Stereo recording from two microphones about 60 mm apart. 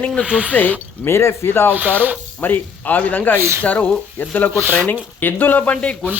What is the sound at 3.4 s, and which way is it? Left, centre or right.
Speech, right.